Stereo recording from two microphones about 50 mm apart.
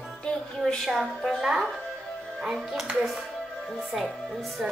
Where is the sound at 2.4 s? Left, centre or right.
Centre.